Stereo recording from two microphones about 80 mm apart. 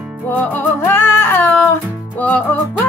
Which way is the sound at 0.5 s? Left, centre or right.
Left.